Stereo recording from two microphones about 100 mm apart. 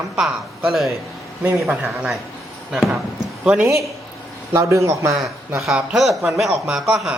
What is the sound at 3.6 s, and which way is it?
A man's voice, 30° right (ahead or behind).